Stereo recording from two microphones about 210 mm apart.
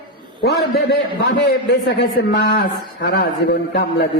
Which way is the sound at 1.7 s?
50° left (ahead or behind).